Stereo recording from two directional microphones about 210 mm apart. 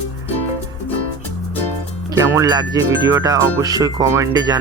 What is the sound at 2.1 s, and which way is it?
Speech, 15° right (ahead or behind).